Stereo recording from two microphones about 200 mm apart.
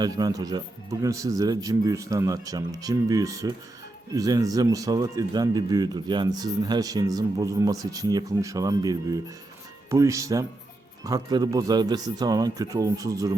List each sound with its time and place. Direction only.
0.0 s speech: 20° right (ahead or behind)